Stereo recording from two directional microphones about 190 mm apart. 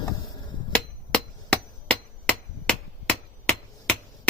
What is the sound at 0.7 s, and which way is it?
Hammer, 5° left (ahead or behind).